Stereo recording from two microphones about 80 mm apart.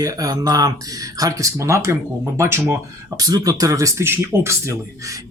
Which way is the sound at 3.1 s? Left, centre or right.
Right.